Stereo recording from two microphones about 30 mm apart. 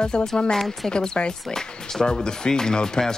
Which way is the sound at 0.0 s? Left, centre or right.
Left.